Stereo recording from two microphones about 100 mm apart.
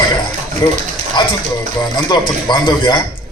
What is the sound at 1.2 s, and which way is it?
Speech, 50° left (ahead or behind).